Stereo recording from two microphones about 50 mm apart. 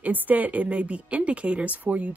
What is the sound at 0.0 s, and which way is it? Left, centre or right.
Speech, right.